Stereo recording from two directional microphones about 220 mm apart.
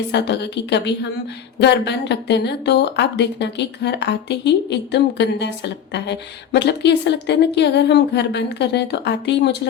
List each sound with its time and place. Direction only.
0.1 s speech: 50° left (ahead or behind)